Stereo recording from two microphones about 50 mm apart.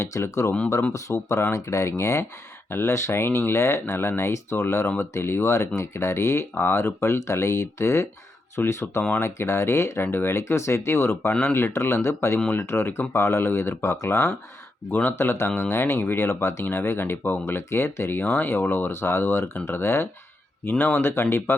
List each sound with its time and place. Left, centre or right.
0.0 s speech: left
1.5 s speech: left
2.6 s speech: left
8.5 s speech: left
10.0 s speech: left
14.9 s speech: left
16.6 s speech: left
18.2 s speech: left
20.7 s speech: left
21.0 s speech: left